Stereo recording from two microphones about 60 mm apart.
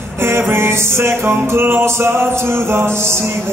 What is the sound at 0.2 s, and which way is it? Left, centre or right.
Music, right.